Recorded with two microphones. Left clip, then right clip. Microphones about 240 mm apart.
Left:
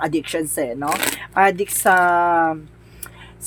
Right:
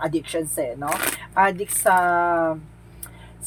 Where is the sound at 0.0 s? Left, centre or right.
Left.